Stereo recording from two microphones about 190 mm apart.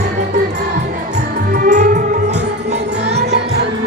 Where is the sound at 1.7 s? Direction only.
40° right (ahead or behind).